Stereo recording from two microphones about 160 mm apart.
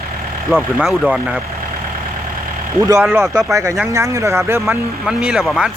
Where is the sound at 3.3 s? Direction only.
20° right (ahead or behind).